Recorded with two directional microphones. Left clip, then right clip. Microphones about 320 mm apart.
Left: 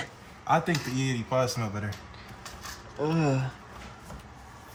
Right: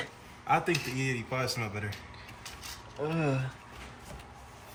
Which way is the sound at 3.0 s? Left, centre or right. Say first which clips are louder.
Left 4 dB; centre.